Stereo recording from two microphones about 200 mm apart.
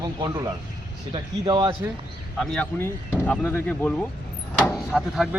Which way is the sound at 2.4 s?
Centre (ahead or behind).